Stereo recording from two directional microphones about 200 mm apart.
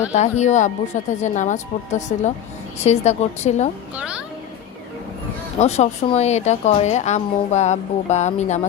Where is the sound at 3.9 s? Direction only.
5° right (ahead or behind).